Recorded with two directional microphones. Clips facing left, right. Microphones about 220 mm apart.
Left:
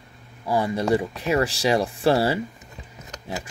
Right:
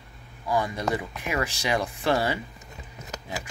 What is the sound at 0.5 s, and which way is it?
Speech, 30° left (ahead or behind).